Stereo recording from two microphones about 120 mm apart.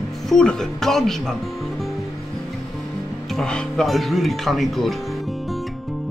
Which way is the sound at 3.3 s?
5° left (ahead or behind).